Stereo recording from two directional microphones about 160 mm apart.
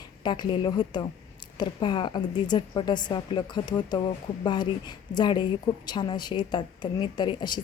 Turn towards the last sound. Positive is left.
turn(degrees=30)  # may be behind; listen again after turning